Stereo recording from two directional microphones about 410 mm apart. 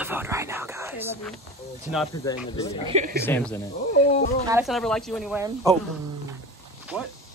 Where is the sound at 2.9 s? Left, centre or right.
Centre.